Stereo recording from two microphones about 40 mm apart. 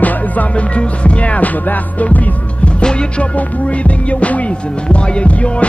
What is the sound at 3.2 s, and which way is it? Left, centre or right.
Music, left.